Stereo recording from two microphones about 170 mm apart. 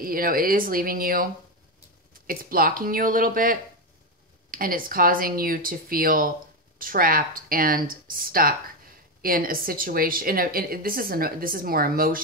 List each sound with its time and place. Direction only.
0.0 s speech: 60° right (ahead or behind)